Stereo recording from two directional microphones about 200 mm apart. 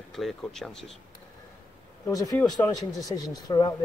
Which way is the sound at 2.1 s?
15° left (ahead or behind).